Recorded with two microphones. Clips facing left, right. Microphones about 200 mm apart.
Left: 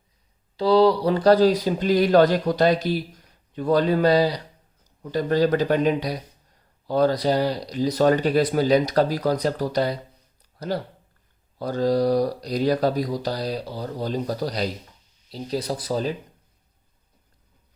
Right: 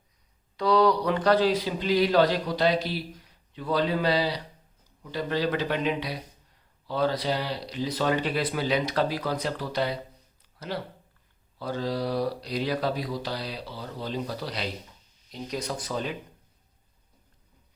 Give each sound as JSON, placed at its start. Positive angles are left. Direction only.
{"t": 0.5, "sound": "speech", "side_deg": 30}